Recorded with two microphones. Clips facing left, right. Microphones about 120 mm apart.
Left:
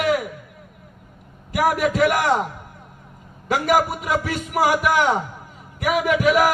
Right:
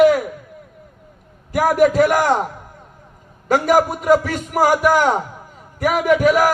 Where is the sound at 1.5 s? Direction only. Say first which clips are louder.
Right 5 dB; 40° right (ahead or behind).